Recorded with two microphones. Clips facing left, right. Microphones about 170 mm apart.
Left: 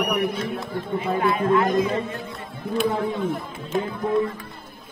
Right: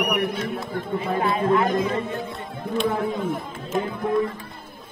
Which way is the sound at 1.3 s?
30° right (ahead or behind).